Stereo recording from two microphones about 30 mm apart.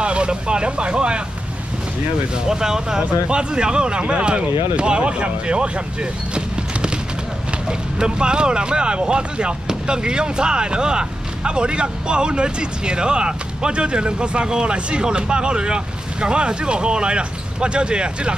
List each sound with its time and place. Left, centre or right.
0.0 s speech: right
2.3 s speech: right
3.1 s speech: right
7.6 s speech: right